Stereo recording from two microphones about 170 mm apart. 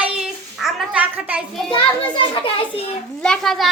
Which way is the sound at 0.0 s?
5° right (ahead or behind).